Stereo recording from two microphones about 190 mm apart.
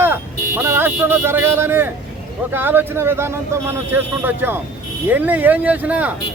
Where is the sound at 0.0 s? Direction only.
10° right (ahead or behind).